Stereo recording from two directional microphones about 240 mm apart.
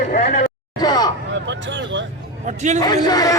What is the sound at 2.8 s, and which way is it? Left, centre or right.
Speech, centre.